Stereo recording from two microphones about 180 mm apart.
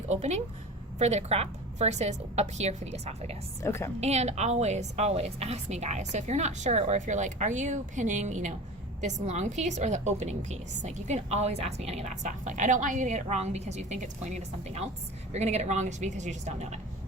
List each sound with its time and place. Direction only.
0.1 s a woman's voice: 40° right (ahead or behind)
3.6 s a woman's voice: 15° left (ahead or behind)
4.0 s a woman's voice: 40° right (ahead or behind)